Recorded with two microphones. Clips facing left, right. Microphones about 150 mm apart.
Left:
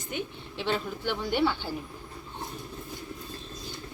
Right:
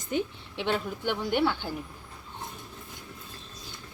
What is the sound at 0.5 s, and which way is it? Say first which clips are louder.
Speech: right 1 dB; 15° right (ahead or behind).